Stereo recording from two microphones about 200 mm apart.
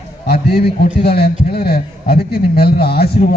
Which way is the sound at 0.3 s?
50° left (ahead or behind).